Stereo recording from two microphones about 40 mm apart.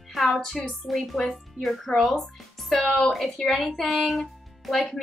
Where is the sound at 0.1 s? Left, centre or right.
Centre.